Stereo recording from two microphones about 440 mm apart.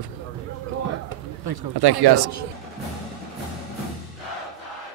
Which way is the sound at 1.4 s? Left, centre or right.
Right.